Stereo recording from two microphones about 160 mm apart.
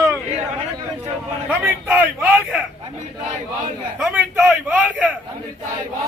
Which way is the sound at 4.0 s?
5° right (ahead or behind).